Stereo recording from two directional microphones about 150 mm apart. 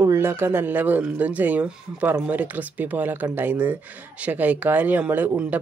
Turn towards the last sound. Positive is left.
turn(degrees=-10)  # may be behind; listen again after turning